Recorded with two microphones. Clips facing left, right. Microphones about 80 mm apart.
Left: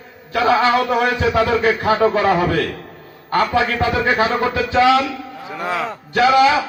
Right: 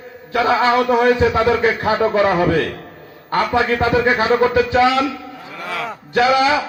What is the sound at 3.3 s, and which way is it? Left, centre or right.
A man's voice, right.